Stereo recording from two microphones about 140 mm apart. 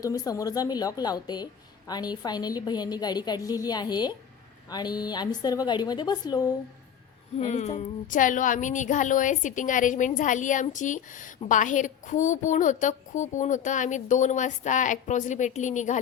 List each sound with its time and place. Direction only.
0.0 s a woman's voice: 25° left (ahead or behind)
7.3 s a woman's voice: 55° left (ahead or behind)